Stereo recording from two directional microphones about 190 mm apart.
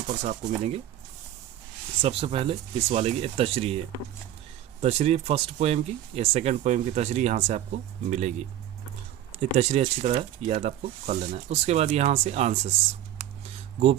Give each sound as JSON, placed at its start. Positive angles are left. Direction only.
{"t": 0.3, "sound": "speech", "side_deg": -35}
{"t": 2.0, "sound": "speech", "side_deg": -30}
{"t": 4.8, "sound": "speech", "side_deg": -35}
{"t": 13.4, "sound": "a sound", "side_deg": -30}